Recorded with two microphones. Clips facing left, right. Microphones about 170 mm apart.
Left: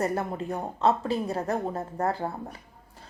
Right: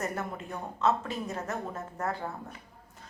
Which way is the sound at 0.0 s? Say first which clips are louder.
Left 6 dB; 35° left (ahead or behind).